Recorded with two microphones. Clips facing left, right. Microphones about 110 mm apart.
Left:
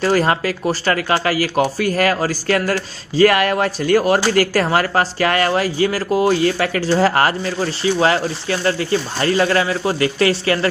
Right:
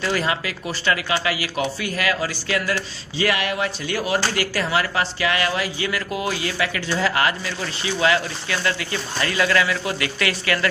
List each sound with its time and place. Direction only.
0.0 s speech: 45° left (ahead or behind)